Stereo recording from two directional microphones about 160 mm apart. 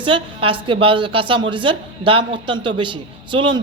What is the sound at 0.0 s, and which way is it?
A woman's voice, 35° right (ahead or behind).